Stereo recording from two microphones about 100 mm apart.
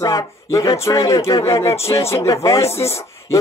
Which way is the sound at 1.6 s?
85° left.